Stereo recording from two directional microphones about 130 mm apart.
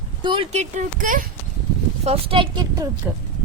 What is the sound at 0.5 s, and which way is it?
Speech, 65° right (ahead or behind).